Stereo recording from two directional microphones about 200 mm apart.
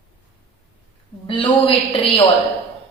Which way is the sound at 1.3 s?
25° left (ahead or behind).